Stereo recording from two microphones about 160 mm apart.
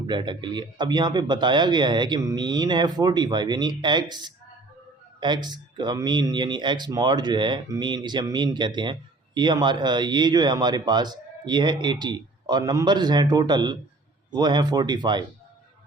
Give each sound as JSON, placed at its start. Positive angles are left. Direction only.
{"t": 0.1, "sound": "speech", "side_deg": -30}